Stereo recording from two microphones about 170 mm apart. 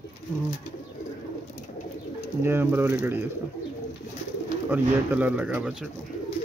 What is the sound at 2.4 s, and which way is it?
Speech, 15° right (ahead or behind).